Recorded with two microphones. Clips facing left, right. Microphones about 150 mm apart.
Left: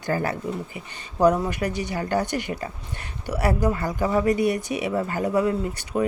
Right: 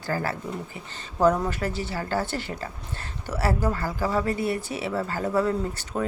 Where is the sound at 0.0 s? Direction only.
20° left (ahead or behind).